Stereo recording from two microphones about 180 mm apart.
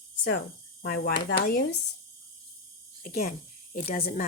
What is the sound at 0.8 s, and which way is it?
Speech, 55° left (ahead or behind).